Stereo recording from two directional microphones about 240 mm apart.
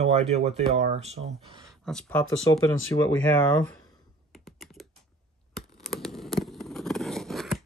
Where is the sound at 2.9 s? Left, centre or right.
Centre.